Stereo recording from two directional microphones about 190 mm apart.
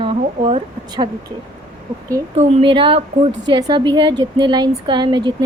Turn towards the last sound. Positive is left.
turn(degrees=-25)  # may be behind; listen again after turning